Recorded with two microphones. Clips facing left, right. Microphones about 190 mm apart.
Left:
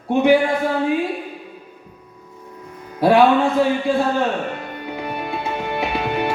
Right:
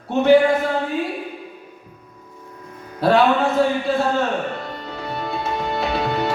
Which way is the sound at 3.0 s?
15° left (ahead or behind).